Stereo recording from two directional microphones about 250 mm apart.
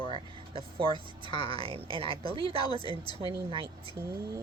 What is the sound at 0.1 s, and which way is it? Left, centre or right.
A woman's voice, right.